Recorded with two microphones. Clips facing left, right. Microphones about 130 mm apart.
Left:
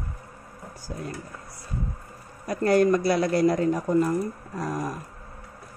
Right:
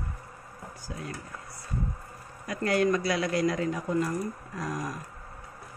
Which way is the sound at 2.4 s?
40° left (ahead or behind).